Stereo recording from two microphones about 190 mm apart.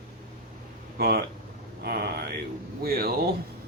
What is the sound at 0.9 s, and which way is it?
Speech, 55° right (ahead or behind).